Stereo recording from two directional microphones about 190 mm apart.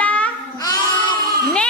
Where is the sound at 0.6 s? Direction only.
25° left (ahead or behind).